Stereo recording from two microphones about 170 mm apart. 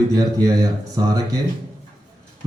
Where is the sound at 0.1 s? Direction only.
20° right (ahead or behind).